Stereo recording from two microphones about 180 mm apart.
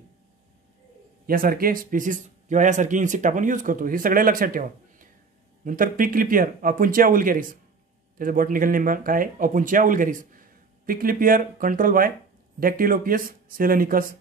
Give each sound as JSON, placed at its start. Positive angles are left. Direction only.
{"t": 1.2, "sound": "speech", "side_deg": -55}